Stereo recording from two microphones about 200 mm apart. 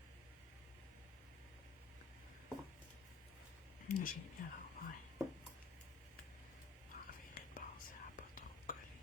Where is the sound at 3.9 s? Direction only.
45° left (ahead or behind).